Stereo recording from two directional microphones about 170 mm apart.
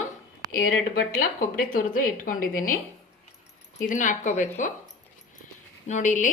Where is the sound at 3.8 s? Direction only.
50° left (ahead or behind).